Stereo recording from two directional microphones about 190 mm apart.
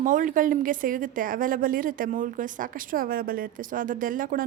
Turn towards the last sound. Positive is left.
turn(degrees=-45)  # may be behind; listen again after turning